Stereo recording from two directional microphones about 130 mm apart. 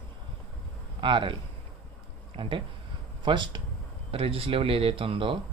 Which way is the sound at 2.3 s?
40° right (ahead or behind).